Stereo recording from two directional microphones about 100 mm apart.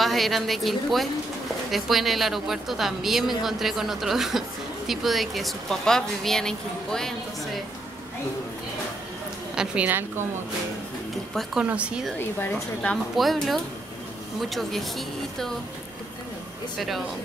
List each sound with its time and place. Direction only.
0.0 s a woman's voice: centre (ahead or behind)
9.6 s a woman's voice: 15° right (ahead or behind)
11.6 s speech: 10° right (ahead or behind)
12.2 s a woman's voice: 20° left (ahead or behind)
12.9 s speech: centre (ahead or behind)